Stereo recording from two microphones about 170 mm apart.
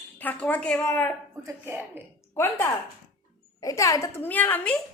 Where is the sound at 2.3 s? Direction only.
15° left (ahead or behind).